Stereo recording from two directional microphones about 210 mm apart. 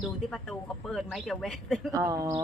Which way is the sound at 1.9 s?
15° right (ahead or behind).